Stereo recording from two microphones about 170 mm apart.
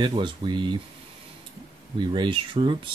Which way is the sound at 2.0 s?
30° right (ahead or behind).